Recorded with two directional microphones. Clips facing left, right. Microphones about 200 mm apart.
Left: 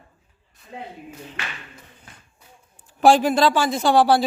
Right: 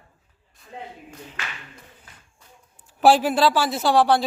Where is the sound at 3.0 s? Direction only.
5° right (ahead or behind).